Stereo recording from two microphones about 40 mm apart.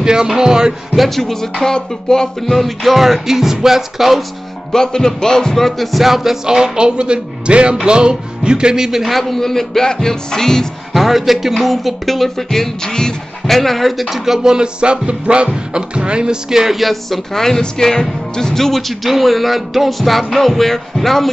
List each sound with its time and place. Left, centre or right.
0.0 s music: centre
0.4 s speech: centre
0.9 s music: centre
2.5 s speech: centre
4.7 s speech: centre
10.9 s speech: centre